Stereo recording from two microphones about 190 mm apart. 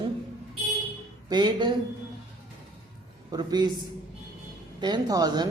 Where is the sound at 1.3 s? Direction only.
25° right (ahead or behind).